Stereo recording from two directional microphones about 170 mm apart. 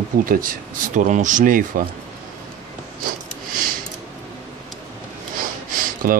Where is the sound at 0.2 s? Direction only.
55° right (ahead or behind).